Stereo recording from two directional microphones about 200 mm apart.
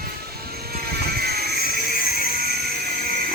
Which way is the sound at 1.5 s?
45° left (ahead or behind).